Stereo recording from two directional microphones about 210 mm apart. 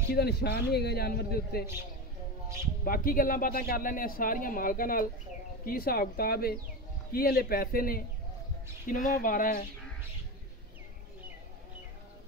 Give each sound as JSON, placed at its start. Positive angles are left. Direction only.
{"t": 0.1, "sound": "a man's voice", "side_deg": 50}
{"t": 2.8, "sound": "a man's voice", "side_deg": 45}